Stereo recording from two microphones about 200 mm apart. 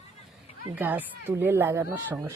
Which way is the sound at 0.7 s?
10° right (ahead or behind).